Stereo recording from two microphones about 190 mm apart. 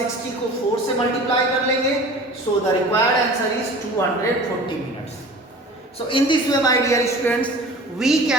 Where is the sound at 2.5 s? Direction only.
20° left (ahead or behind).